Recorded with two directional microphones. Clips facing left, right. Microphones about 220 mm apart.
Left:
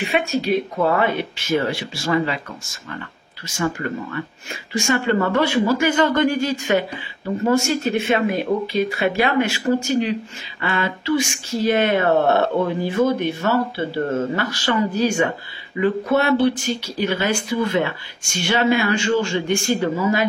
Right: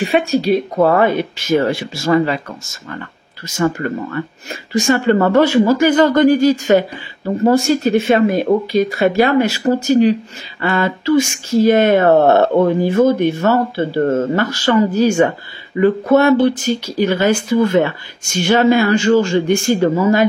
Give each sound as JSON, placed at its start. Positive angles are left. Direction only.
{"t": 0.0, "sound": "speech", "side_deg": -35}
{"t": 3.4, "sound": "speech", "side_deg": -40}